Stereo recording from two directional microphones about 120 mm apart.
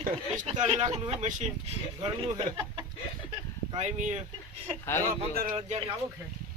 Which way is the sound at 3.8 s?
80° right.